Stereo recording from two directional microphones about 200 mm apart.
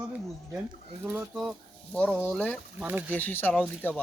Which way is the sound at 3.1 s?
10° left (ahead or behind).